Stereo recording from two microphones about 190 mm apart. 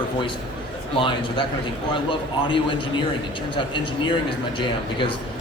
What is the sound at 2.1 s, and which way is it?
A man's voice, 25° left (ahead or behind).